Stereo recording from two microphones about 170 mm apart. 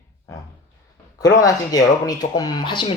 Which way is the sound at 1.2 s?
20° left (ahead or behind).